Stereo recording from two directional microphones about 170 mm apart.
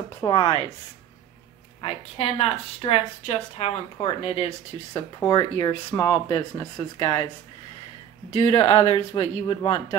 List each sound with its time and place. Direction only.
0.2 s speech: 25° left (ahead or behind)
1.8 s speech: 35° left (ahead or behind)
4.9 s speech: 20° left (ahead or behind)
8.4 s speech: 30° left (ahead or behind)